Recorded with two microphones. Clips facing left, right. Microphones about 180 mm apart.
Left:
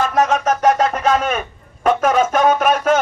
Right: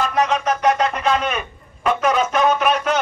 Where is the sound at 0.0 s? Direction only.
45° left (ahead or behind).